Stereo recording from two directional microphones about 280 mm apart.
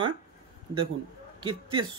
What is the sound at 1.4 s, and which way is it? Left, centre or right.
Speech, centre.